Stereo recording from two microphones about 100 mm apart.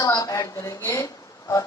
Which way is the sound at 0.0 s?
40° left (ahead or behind).